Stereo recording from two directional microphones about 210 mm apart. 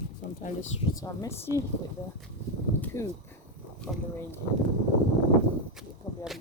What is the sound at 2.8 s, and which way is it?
Speech, 10° left (ahead or behind).